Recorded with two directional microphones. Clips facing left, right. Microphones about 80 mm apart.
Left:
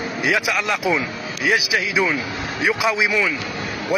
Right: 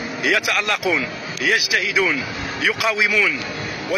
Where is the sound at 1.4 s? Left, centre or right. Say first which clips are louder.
Even; centre.